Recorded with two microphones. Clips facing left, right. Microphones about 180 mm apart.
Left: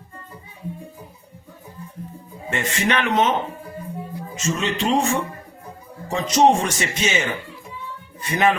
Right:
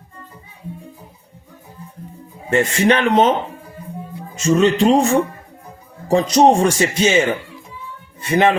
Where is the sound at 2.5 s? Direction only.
35° right (ahead or behind).